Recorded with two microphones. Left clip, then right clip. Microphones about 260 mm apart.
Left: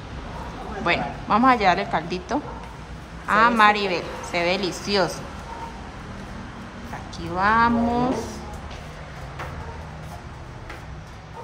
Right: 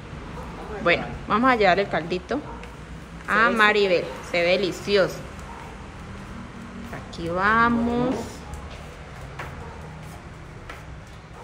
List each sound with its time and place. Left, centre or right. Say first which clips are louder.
0.8 s a woman's voice: right 1 dB; centre
7.2 s a woman's voice: left 1 dB; centre